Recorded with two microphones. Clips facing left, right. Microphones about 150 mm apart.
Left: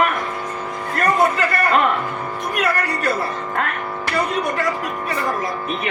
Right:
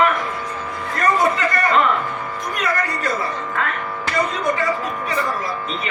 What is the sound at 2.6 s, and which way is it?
Music, 65° left (ahead or behind).